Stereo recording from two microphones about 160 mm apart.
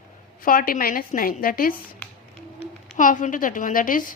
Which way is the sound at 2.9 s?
55° left (ahead or behind).